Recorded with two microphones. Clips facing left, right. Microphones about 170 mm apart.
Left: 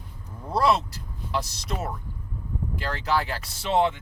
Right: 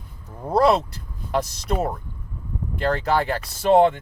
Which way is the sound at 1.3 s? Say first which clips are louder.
Right 6 dB; 55° right (ahead or behind).